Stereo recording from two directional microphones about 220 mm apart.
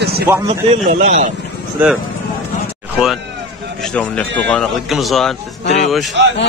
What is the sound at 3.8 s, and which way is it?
A man's voice, 5° left (ahead or behind).